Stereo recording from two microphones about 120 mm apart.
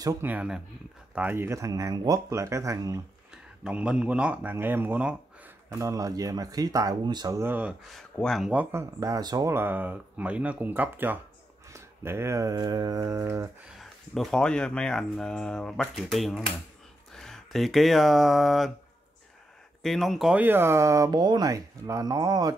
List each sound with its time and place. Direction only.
0.2 s speech: 15° right (ahead or behind); by 3.0 s 30° right (ahead or behind)
3.6 s speech: 5° right (ahead or behind)
5.7 s speech: 25° right (ahead or behind)
7.9 s speech: centre (ahead or behind)
8.5 s speech: 15° right (ahead or behind)
9.0 s speech: 30° right (ahead or behind)
9.5 s speech: 15° right (ahead or behind)
13.7 s speech: centre (ahead or behind)
19.8 s speech: centre (ahead or behind)
20.3 s speech: 15° right (ahead or behind)